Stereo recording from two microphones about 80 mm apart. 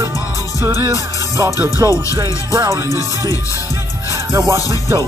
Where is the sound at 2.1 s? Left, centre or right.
Right.